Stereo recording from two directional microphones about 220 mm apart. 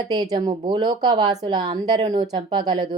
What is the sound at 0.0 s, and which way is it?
A woman's voice, 15° right (ahead or behind).